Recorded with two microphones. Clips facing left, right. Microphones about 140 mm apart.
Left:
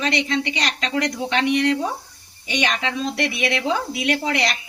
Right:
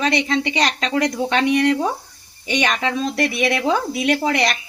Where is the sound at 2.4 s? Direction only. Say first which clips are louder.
Right 3 dB; 40° right (ahead or behind).